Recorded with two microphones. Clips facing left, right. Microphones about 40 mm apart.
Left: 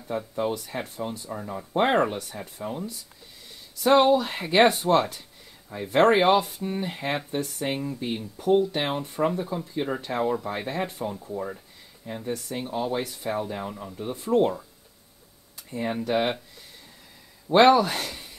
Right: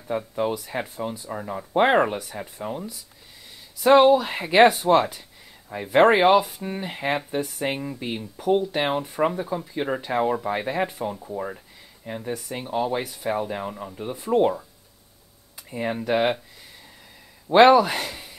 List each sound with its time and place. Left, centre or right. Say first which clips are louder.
0.4 s speech: right 2 dB; centre
1.3 s speech: right 4 dB; right
4.0 s speech: right 3 dB; centre
14.0 s speech: even; centre
15.9 s speech: right 3 dB; centre
17.6 s speech: right 3 dB; centre